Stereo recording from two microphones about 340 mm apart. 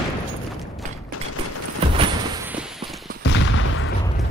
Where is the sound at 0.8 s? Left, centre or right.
Right.